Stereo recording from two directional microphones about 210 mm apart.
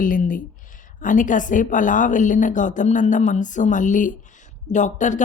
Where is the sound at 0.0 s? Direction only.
40° left (ahead or behind).